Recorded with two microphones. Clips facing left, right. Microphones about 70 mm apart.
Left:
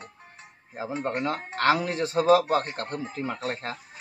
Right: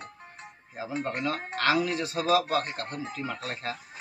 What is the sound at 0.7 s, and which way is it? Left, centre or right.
Speech, left.